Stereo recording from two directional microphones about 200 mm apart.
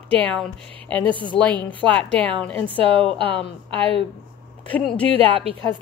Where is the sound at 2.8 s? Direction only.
25° right (ahead or behind).